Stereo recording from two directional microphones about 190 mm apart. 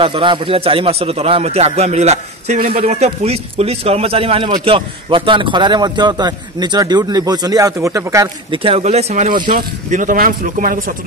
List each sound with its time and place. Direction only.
0.0 s a man's voice: 25° right (ahead or behind)
8.6 s speech: 30° right (ahead or behind)